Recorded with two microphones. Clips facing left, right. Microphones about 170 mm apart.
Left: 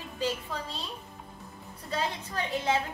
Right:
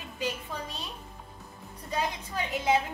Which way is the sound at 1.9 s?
15° right (ahead or behind).